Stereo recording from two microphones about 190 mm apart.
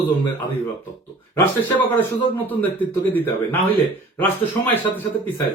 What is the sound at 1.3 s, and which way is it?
A man's voice, 10° left (ahead or behind).